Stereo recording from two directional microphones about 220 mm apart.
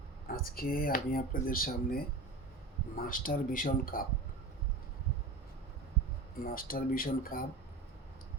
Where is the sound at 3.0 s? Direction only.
40° left (ahead or behind).